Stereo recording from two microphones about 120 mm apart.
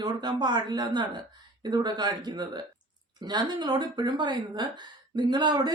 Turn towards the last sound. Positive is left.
turn(degrees=-35)  # may be behind; listen again after turning